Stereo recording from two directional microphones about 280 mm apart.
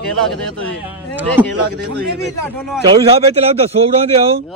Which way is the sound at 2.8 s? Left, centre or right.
Centre.